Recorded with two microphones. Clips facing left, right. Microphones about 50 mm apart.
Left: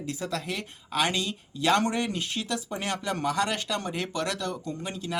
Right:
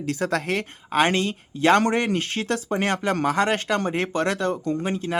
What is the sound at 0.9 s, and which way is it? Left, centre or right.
Speech, right.